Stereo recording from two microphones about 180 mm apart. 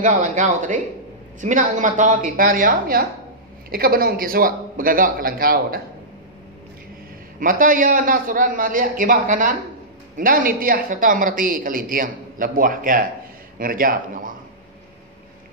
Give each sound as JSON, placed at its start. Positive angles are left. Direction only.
{"t": 0.0, "sound": "speech", "side_deg": -45}
{"t": 7.3, "sound": "speech", "side_deg": -50}